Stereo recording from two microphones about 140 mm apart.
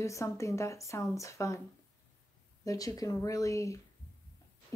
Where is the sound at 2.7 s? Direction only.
25° left (ahead or behind).